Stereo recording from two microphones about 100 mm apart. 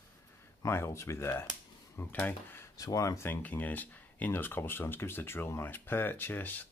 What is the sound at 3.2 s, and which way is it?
Speech, 20° left (ahead or behind).